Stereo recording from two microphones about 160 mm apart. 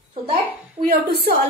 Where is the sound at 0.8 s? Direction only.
65° right (ahead or behind).